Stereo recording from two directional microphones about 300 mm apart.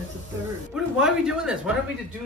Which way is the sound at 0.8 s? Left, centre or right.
Centre.